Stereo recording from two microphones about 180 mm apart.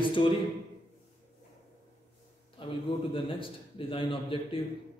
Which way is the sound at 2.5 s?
30° left (ahead or behind).